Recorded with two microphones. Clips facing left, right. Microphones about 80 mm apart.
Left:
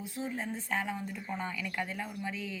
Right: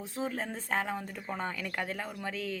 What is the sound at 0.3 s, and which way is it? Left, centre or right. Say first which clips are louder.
Speech: even; right.